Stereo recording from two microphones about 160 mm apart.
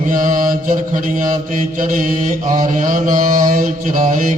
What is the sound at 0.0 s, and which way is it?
Mantra, 55° right (ahead or behind).